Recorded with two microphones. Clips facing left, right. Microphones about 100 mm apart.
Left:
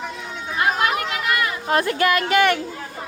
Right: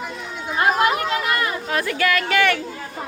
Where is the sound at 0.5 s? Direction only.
30° right (ahead or behind).